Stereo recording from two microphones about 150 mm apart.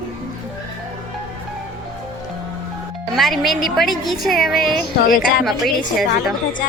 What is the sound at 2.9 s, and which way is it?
A woman's voice, centre (ahead or behind).